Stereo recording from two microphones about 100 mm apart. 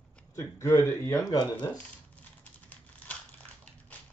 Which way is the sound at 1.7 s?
15° left (ahead or behind).